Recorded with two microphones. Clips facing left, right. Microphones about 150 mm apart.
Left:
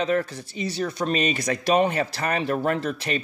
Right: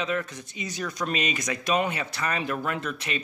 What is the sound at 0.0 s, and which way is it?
Speech, 35° left (ahead or behind).